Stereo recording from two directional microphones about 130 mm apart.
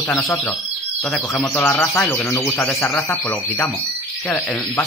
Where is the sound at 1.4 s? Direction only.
20° left (ahead or behind).